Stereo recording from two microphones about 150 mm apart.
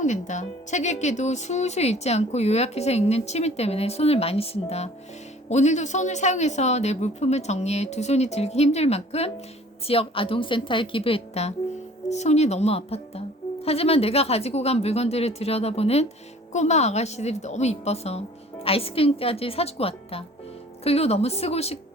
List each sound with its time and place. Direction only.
0.0 s a woman's voice: 55° left (ahead or behind)